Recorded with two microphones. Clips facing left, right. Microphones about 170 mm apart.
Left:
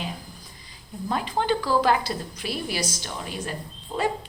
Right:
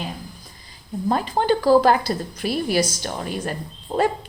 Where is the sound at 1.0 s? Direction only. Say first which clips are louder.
Right 5 dB; 40° right (ahead or behind).